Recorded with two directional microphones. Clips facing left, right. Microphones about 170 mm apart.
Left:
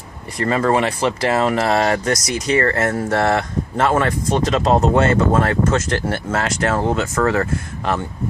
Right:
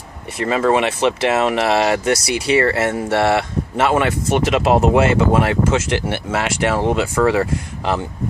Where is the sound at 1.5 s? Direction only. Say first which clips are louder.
Right 1 dB; 10° right (ahead or behind).